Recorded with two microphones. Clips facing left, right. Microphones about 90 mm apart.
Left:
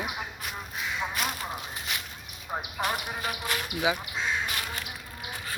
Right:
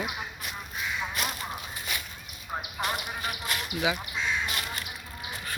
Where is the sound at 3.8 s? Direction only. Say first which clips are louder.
Left 1 dB; 25° left (ahead or behind).